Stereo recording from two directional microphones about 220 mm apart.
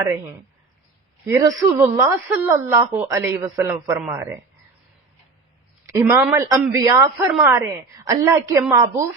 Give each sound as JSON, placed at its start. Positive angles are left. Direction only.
{"t": 1.3, "sound": "speech", "side_deg": -15}
{"t": 5.8, "sound": "speech", "side_deg": -15}